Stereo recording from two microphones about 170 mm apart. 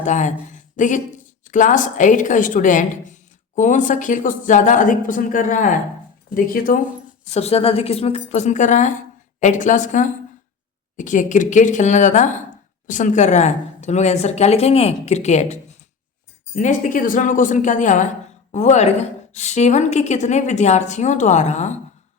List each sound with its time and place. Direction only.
0.0 s a woman's voice: 45° left (ahead or behind)
7.3 s a woman's voice: 40° left (ahead or behind)
16.6 s a woman's voice: 50° left (ahead or behind)